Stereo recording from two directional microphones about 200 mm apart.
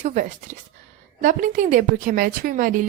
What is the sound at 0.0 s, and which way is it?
A woman's voice, 35° right (ahead or behind).